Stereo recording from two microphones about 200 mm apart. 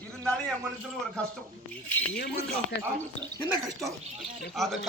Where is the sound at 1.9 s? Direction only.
10° left (ahead or behind).